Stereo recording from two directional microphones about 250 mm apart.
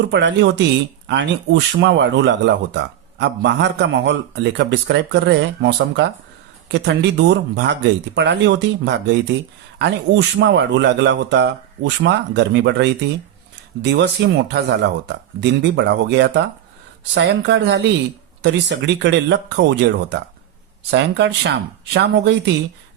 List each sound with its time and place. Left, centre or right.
0.1 s speech: right